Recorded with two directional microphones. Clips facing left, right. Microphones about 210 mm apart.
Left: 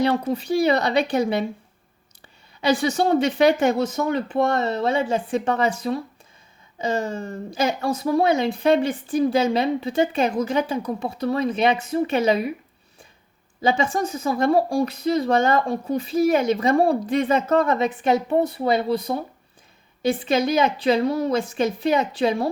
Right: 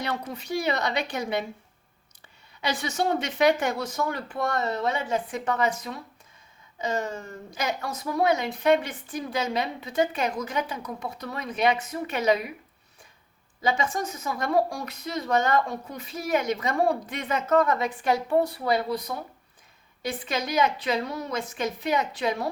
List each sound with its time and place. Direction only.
0.0 s speech: 30° left (ahead or behind)
2.6 s a woman's voice: 30° left (ahead or behind)
13.6 s a woman's voice: 30° left (ahead or behind)